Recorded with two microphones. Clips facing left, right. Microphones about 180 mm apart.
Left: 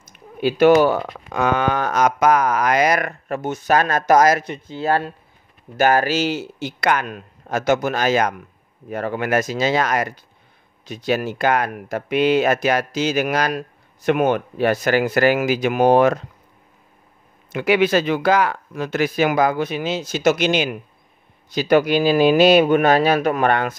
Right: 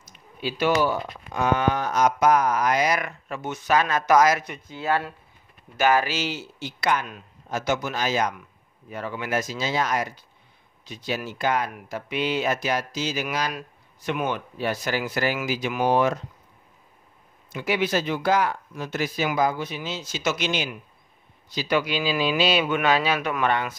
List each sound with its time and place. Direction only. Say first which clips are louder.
0.1 s speech: left 10 dB; 55° left (ahead or behind)
4.5 s speech: left 5 dB; 30° left (ahead or behind)
5.8 s speech: left 5 dB; 45° left (ahead or behind)
6.8 s speech: left 4 dB; 70° left (ahead or behind)
10.9 s speech: left 9 dB; 60° left (ahead or behind)
17.5 s speech: left 8 dB; 75° left (ahead or behind)
21.5 s speech: left 9 dB; 50° left (ahead or behind)
23.5 s speech: left 5 dB; 55° left (ahead or behind)